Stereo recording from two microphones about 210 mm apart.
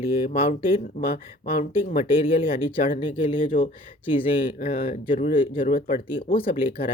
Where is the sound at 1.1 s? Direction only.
35° left (ahead or behind).